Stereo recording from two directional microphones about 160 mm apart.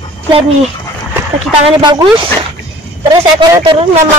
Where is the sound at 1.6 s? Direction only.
35° right (ahead or behind).